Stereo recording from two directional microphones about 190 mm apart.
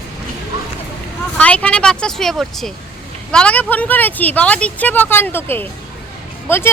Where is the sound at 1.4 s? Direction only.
5° left (ahead or behind).